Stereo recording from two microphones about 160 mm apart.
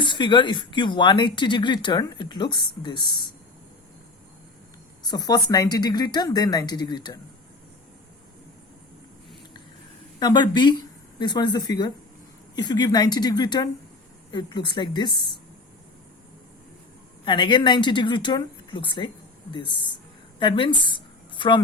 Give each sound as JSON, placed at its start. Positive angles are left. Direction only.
{"t": 0.0, "sound": "speech", "side_deg": 30}
{"t": 5.0, "sound": "speech", "side_deg": 25}
{"t": 10.2, "sound": "speech", "side_deg": 25}
{"t": 17.2, "sound": "speech", "side_deg": 30}